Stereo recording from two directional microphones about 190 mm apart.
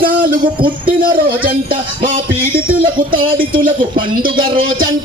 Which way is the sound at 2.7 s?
50° right (ahead or behind).